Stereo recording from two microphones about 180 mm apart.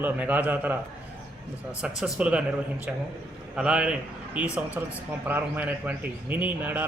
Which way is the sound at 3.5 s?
5° right (ahead or behind).